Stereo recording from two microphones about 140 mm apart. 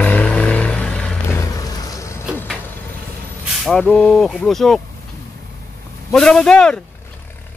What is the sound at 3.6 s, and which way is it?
Speech, 5° left (ahead or behind).